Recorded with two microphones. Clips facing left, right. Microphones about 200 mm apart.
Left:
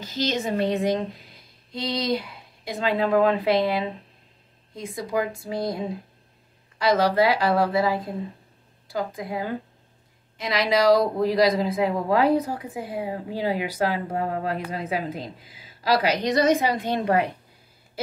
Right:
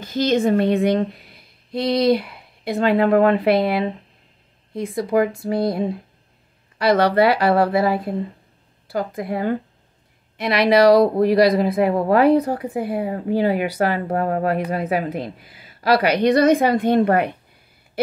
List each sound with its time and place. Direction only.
0.0 s speech: 55° right (ahead or behind)